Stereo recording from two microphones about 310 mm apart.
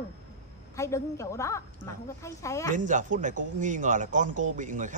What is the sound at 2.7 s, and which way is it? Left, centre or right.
Speech, right.